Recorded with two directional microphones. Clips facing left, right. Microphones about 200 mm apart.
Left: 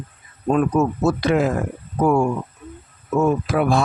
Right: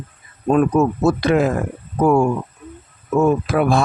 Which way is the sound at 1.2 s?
60° right (ahead or behind).